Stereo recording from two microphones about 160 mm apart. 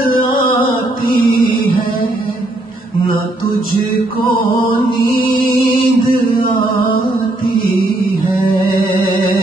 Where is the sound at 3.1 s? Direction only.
30° left (ahead or behind).